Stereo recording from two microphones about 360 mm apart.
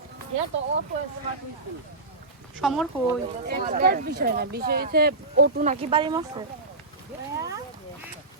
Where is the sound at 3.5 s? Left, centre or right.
Right.